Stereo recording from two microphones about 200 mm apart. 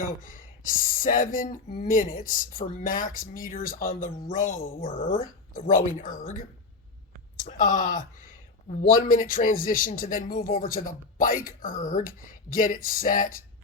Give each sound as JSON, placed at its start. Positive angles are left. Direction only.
{"t": 0.0, "sound": "a woman's voice", "side_deg": 45}